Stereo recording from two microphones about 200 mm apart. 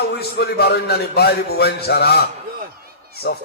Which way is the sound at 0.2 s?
55° left (ahead or behind).